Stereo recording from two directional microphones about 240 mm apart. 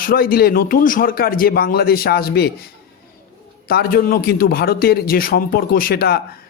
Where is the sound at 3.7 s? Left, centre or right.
Left.